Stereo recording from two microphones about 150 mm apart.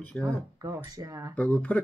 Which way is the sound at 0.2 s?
25° right (ahead or behind).